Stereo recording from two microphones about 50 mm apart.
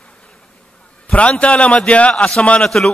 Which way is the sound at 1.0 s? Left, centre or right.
Left.